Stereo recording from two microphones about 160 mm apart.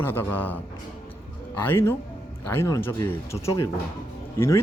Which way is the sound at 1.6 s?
15° left (ahead or behind).